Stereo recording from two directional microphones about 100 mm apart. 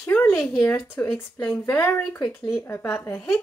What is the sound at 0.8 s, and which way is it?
Speech, 20° left (ahead or behind).